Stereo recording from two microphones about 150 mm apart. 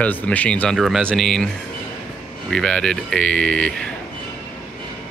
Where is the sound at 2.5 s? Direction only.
5° left (ahead or behind).